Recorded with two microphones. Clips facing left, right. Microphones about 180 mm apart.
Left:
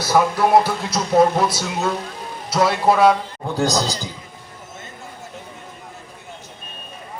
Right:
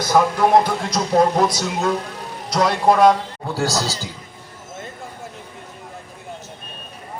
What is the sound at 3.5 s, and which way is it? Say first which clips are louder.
Speech: left 2 dB; 15° left (ahead or behind).